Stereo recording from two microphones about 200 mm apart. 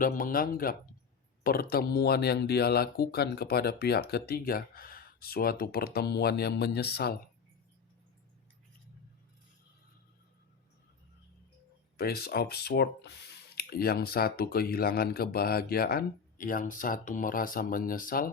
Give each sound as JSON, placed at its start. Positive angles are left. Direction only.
{"t": 0.0, "sound": "speech", "side_deg": 45}
{"t": 11.9, "sound": "speech", "side_deg": 50}